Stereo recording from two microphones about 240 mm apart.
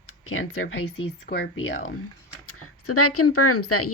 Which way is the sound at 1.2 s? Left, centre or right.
Left.